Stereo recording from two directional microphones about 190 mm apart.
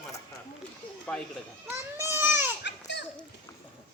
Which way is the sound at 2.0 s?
15° right (ahead or behind).